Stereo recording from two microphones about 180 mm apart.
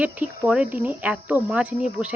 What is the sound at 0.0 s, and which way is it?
Speech, 5° right (ahead or behind).